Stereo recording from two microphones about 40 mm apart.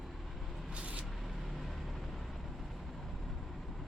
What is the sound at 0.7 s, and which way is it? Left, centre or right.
Vehicle, right.